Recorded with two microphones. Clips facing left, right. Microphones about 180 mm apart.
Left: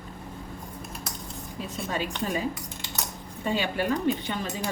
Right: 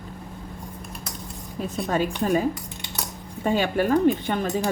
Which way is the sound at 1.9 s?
50° right (ahead or behind).